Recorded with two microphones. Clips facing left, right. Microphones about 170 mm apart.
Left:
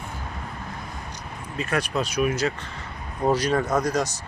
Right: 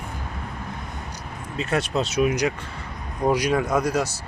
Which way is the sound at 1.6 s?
25° right (ahead or behind).